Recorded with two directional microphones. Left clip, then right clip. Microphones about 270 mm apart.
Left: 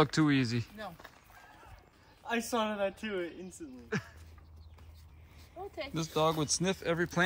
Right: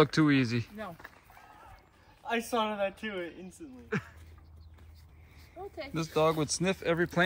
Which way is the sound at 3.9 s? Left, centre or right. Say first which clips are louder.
Right 2 dB; centre.